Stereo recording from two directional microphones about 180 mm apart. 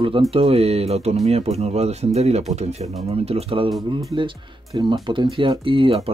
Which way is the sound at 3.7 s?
Centre (ahead or behind).